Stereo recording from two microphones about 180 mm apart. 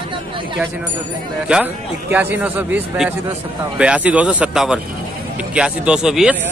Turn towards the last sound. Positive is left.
turn(degrees=-5)  # may be behind; listen again after turning